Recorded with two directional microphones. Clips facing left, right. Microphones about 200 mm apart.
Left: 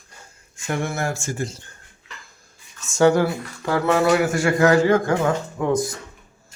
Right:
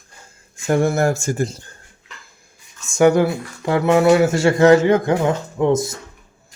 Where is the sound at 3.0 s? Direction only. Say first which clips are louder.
Right 3 dB; 15° right (ahead or behind).